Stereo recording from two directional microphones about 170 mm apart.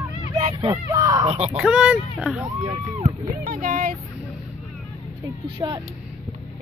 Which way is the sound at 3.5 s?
50° right (ahead or behind).